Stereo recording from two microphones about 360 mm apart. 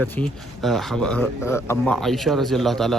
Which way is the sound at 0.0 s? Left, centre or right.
Centre.